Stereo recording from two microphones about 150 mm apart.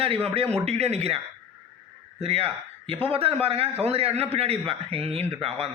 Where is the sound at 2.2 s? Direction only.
40° right (ahead or behind).